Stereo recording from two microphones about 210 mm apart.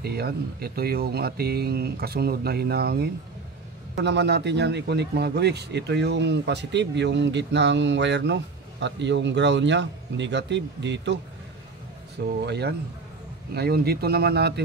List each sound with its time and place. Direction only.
0.0 s a man's voice: 50° right (ahead or behind)
12.4 s speech: 55° right (ahead or behind)